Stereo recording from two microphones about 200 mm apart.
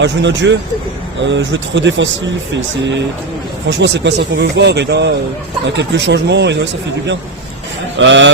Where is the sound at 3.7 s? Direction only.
60° right (ahead or behind).